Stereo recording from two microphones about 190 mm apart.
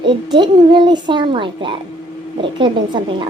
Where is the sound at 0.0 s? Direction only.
25° right (ahead or behind).